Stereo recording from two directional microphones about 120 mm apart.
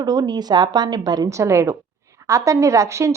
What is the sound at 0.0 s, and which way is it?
A woman's voice, 30° right (ahead or behind).